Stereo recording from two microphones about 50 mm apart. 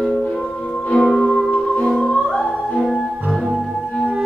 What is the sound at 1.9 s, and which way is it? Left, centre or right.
Music, centre.